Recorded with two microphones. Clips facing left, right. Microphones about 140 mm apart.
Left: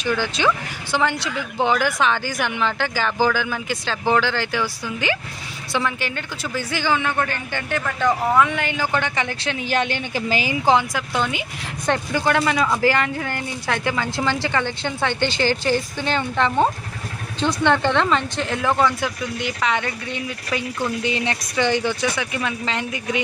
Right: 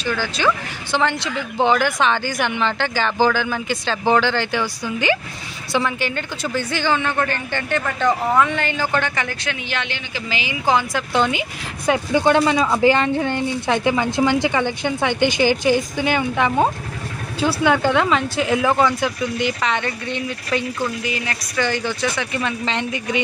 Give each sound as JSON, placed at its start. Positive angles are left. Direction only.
{"t": 0.0, "sound": "speech", "side_deg": 15}
{"t": 0.9, "sound": "a woman's voice", "side_deg": 5}
{"t": 9.7, "sound": "a woman's voice", "side_deg": 45}
{"t": 10.6, "sound": "speech", "side_deg": 25}
{"t": 10.9, "sound": "a woman's voice", "side_deg": 0}
{"t": 12.1, "sound": "a woman's voice", "side_deg": -20}
{"t": 21.0, "sound": "speech", "side_deg": 30}